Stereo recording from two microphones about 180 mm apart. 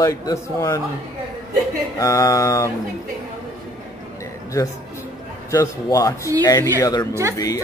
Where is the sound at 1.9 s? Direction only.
20° left (ahead or behind).